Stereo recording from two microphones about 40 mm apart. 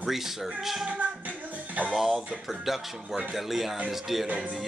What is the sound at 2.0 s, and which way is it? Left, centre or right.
Speech, centre.